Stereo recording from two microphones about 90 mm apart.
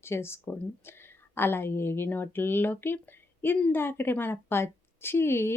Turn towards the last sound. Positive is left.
turn(degrees=25)  # may be behind; listen again after turning